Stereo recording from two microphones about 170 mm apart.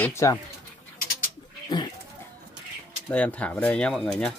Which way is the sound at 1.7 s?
25° left (ahead or behind).